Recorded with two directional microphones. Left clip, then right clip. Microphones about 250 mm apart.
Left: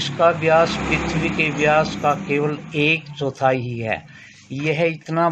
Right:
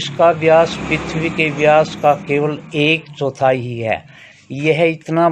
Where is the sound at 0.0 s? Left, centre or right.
Right.